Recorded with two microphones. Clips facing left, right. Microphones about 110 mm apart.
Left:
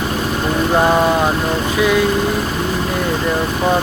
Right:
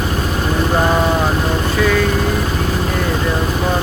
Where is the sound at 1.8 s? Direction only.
15° left (ahead or behind).